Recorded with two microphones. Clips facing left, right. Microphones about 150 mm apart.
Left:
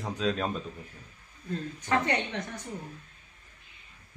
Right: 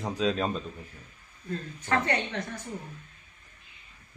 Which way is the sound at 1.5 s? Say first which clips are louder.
Even; 15° left (ahead or behind).